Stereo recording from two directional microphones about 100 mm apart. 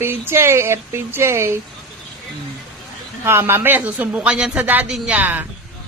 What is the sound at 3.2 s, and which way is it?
Speech, 25° right (ahead or behind).